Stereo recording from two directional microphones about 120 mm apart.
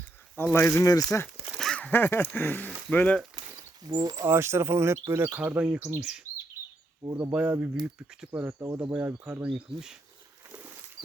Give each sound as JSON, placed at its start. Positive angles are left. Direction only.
{"t": 0.3, "sound": "speech", "side_deg": 15}
{"t": 1.5, "sound": "speech", "side_deg": 5}
{"t": 3.5, "sound": "a sound", "side_deg": -35}
{"t": 4.3, "sound": "speech", "side_deg": -20}